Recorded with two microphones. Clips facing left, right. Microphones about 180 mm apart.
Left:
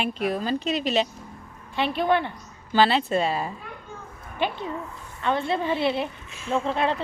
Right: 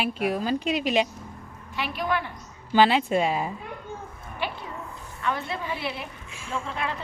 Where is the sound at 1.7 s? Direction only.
25° left (ahead or behind).